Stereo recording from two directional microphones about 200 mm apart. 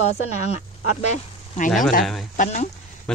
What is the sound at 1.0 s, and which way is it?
Speech, 35° left (ahead or behind).